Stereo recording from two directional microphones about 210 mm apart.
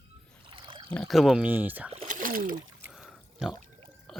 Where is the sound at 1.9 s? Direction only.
30° right (ahead or behind).